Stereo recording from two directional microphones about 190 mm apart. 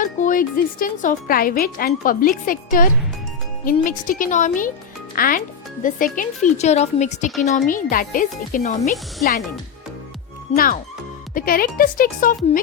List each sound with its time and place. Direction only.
0.0 s a child's voice: 45° left (ahead or behind)
10.5 s speech: 50° left (ahead or behind)